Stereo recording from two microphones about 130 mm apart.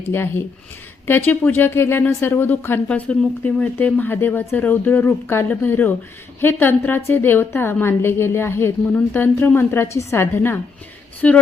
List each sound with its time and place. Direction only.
0.1 s speech: 20° left (ahead or behind)